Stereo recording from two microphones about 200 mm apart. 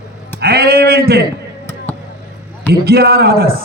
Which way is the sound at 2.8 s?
50° right (ahead or behind).